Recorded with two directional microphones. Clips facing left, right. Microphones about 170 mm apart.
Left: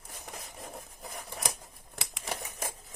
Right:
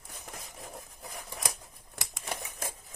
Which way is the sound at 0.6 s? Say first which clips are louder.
Left 1 dB; centre (ahead or behind).